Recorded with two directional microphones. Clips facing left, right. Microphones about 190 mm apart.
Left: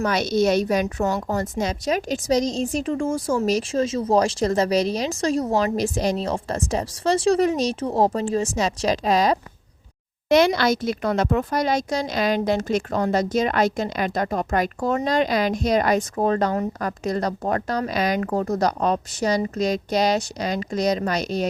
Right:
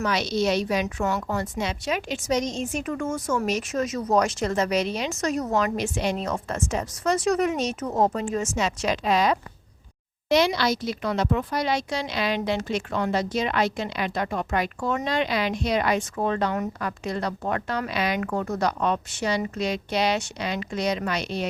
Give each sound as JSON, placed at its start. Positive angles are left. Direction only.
{"t": 0.0, "sound": "speech", "side_deg": 45}
{"t": 10.2, "sound": "speech", "side_deg": 50}